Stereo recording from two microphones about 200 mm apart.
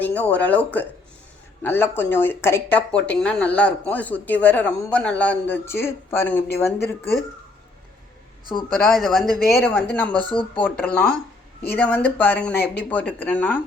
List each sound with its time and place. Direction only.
0.0 s speech: 10° left (ahead or behind)
8.8 s speech: centre (ahead or behind)
9.5 s speech: 10° left (ahead or behind)
10.2 s speech: 25° left (ahead or behind)
10.6 s speech: 5° left (ahead or behind)